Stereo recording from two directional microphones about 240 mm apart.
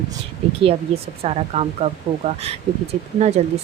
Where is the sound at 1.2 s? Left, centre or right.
Right.